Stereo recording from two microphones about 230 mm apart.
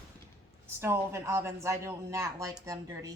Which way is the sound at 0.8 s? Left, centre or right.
Centre.